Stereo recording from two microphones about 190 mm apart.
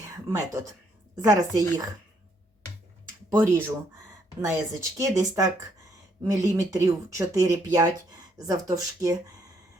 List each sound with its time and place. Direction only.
0.3 s a woman's voice: 15° right (ahead or behind)
3.2 s speech: 15° right (ahead or behind)